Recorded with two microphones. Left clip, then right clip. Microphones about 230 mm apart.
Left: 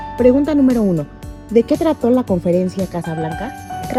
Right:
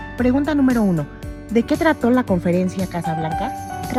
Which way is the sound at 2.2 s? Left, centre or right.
Right.